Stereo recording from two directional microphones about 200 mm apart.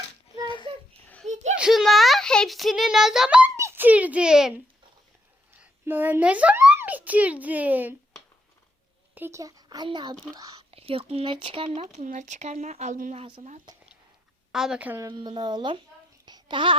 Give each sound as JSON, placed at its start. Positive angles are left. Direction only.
{"t": 0.4, "sound": "a sound", "side_deg": 25}
{"t": 1.5, "sound": "a child's voice", "side_deg": 0}
{"t": 9.1, "sound": "speech", "side_deg": -10}
{"t": 11.9, "sound": "speech", "side_deg": -40}
{"t": 14.5, "sound": "a woman's voice", "side_deg": -5}
{"t": 16.2, "sound": "child singing", "side_deg": -20}